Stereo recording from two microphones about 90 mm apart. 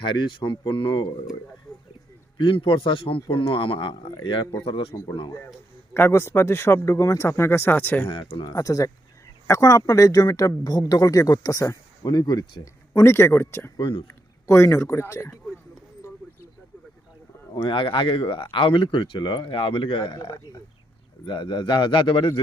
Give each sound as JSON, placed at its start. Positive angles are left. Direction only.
{"t": 0.0, "sound": "speech", "side_deg": 65}
{"t": 2.4, "sound": "a man's voice", "side_deg": 80}
{"t": 4.6, "sound": "speech", "side_deg": 90}
{"t": 5.9, "sound": "speech", "side_deg": 25}
{"t": 8.1, "sound": "a man's voice", "side_deg": 75}
{"t": 8.4, "sound": "speech", "side_deg": 40}
{"t": 13.1, "sound": "speech", "side_deg": 30}
{"t": 13.7, "sound": "a man's voice", "side_deg": 70}
{"t": 14.1, "sound": "speech", "side_deg": 30}
{"t": 16.0, "sound": "bird", "side_deg": 30}
{"t": 17.5, "sound": "a man's voice", "side_deg": 65}